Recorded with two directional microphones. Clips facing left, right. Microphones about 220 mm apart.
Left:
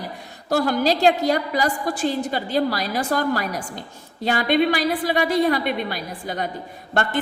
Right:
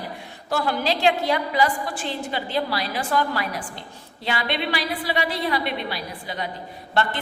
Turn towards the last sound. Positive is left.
turn(degrees=45)  # may be behind; listen again after turning